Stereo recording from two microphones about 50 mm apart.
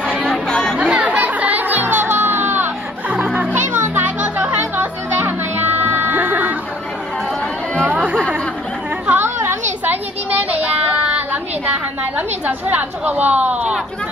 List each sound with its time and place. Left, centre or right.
0.3 s chatter: centre
0.7 s music: right
5.8 s music: right
6.1 s music: right
9.0 s chatter: right
9.8 s a sound: right
12.2 s a woman's voice: right